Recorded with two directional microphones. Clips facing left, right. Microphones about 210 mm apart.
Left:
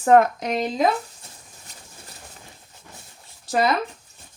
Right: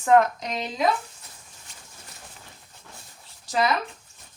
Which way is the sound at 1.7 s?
40° left (ahead or behind).